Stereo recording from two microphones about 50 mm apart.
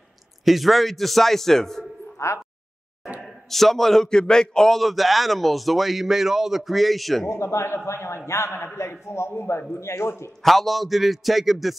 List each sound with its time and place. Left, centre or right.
0.5 s a man's voice: centre
2.1 s speech: left
3.3 s a man's voice: centre
7.2 s a man's voice: left
10.4 s a man's voice: centre